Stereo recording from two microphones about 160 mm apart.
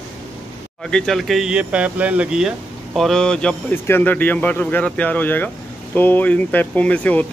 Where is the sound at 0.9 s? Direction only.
5° left (ahead or behind).